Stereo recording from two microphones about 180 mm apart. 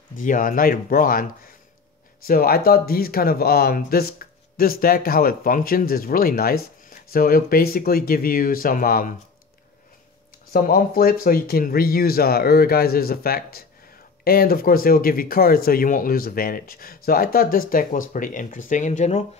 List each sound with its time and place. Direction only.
0.2 s speech: 45° left (ahead or behind)
2.2 s speech: 55° left (ahead or behind)
10.5 s speech: 55° left (ahead or behind)